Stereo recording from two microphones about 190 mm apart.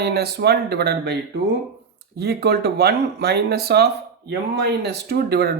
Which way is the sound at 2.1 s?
60° right (ahead or behind).